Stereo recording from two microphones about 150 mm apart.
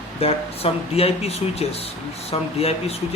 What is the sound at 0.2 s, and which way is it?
Speech, 40° left (ahead or behind).